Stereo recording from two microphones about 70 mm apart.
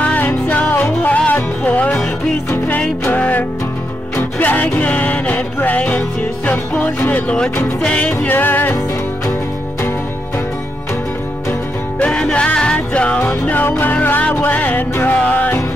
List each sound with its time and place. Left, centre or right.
0.0 s music: left
3.1 s music: left
12.0 s music: centre
13.3 s music: left